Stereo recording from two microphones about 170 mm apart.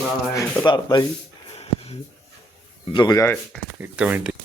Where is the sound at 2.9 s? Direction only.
20° left (ahead or behind).